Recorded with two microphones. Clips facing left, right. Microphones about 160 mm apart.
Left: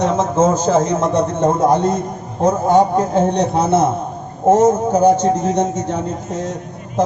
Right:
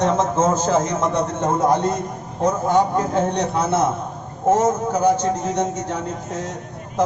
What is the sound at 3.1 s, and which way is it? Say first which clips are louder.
Speech: left 6 dB; 25° left (ahead or behind).